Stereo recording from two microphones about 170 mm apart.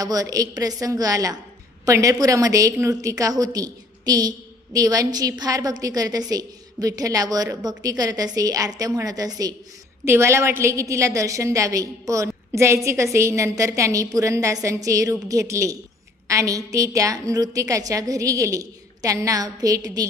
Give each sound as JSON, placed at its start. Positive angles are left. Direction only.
{"t": 0.0, "sound": "a woman's voice", "side_deg": -20}